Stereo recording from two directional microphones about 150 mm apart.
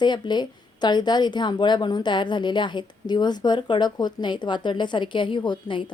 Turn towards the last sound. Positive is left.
turn(degrees=35)  # may be behind; listen again after turning